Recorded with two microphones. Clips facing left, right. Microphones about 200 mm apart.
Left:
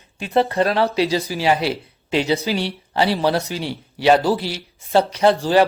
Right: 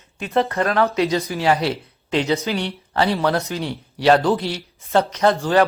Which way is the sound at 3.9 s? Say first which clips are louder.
Even; 5° left (ahead or behind).